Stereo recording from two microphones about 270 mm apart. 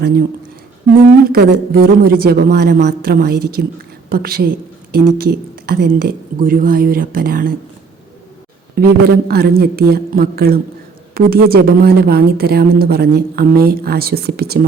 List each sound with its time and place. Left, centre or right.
1.2 s a woman's voice: right
8.7 s a woman's voice: right